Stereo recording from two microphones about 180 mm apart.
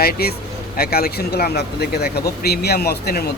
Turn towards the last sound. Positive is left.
turn(degrees=60)  # may be behind; listen again after turning